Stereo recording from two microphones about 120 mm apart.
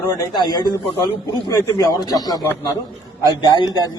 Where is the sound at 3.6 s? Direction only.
35° left (ahead or behind).